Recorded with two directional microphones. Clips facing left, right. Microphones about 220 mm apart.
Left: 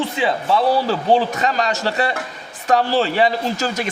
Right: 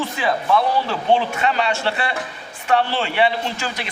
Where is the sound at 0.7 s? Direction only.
35° left (ahead or behind).